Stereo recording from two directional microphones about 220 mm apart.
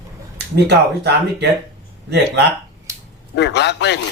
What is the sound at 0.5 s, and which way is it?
Speech, 50° right (ahead or behind).